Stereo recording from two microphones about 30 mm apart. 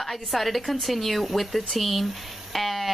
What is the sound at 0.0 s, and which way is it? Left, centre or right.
Speech, centre.